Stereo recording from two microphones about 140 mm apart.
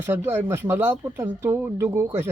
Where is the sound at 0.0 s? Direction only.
15° right (ahead or behind).